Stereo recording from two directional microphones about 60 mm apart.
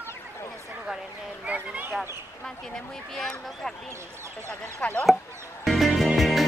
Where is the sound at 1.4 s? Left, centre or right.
Right.